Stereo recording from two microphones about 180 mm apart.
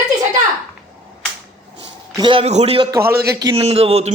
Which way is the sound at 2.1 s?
25° right (ahead or behind).